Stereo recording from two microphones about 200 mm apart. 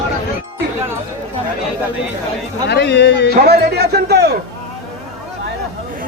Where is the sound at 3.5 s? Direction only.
55° right (ahead or behind).